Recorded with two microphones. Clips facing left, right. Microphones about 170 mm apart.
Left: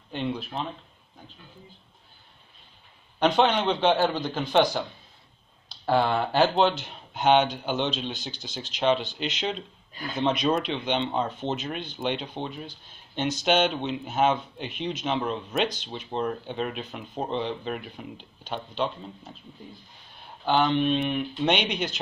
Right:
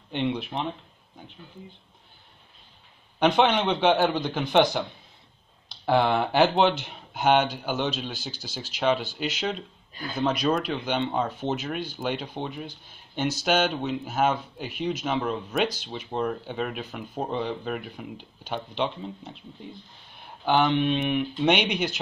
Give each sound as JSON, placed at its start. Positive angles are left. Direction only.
{"t": 0.1, "sound": "speech", "side_deg": -20}
{"t": 3.2, "sound": "speech", "side_deg": -10}
{"t": 20.4, "sound": "speech", "side_deg": -15}